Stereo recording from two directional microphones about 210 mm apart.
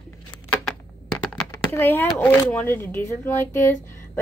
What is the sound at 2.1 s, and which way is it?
A woman's voice, 10° left (ahead or behind).